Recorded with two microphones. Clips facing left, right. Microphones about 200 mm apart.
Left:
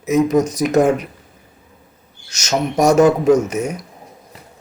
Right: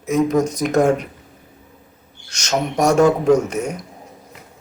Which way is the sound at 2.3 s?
5° left (ahead or behind).